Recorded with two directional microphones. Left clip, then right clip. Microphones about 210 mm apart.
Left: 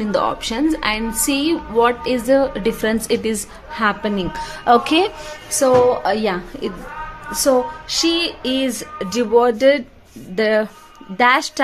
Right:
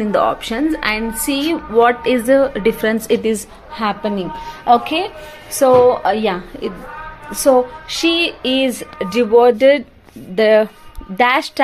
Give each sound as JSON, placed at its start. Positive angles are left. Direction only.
{"t": 0.1, "sound": "a woman's voice", "side_deg": 0}
{"t": 5.6, "sound": "a woman's voice", "side_deg": -5}
{"t": 8.1, "sound": "a woman's voice", "side_deg": -5}